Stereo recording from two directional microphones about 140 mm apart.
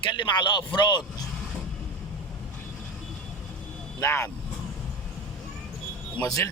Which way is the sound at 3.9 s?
20° left (ahead or behind).